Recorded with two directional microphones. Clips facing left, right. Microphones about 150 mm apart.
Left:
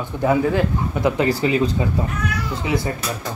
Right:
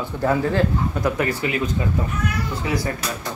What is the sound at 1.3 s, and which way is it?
Speech, 30° left (ahead or behind).